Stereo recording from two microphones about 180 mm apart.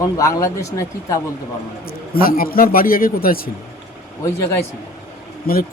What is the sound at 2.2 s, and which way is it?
A man's voice, 55° left (ahead or behind).